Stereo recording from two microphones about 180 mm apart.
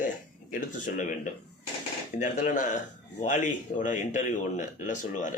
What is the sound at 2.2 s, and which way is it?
Speech, 45° left (ahead or behind).